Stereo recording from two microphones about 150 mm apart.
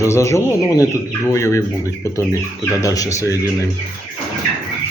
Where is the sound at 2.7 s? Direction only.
25° left (ahead or behind).